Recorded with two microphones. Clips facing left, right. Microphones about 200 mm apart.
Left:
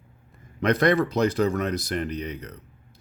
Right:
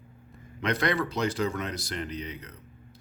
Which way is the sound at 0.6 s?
45° left (ahead or behind).